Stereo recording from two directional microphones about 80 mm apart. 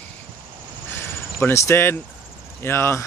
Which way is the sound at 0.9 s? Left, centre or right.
Left.